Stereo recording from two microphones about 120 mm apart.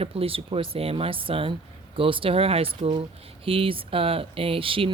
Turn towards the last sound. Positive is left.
turn(degrees=-50)  # may be behind; listen again after turning